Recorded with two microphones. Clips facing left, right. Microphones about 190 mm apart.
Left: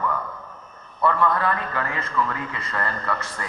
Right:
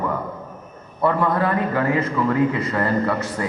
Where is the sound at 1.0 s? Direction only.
15° right (ahead or behind).